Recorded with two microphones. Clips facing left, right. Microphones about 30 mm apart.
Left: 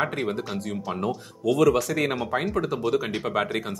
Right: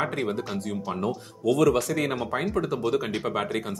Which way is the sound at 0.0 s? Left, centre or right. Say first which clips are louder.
Left 1 dB; centre.